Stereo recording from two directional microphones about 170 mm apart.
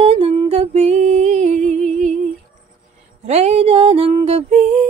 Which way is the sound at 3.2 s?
40° right (ahead or behind).